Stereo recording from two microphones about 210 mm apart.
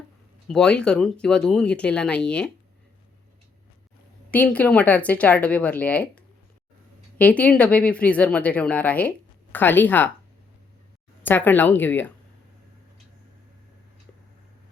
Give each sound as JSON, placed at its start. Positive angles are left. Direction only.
{"t": 0.4, "sound": "speech", "side_deg": 5}
{"t": 4.3, "sound": "speech", "side_deg": 5}
{"t": 11.2, "sound": "speech", "side_deg": 10}